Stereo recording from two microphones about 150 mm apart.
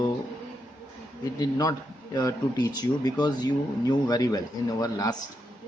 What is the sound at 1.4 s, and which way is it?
A man's voice, 25° left (ahead or behind).